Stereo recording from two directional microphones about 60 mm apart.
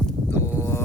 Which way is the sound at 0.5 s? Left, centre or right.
Left.